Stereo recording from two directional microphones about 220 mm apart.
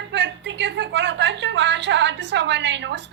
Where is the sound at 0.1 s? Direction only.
55° right (ahead or behind).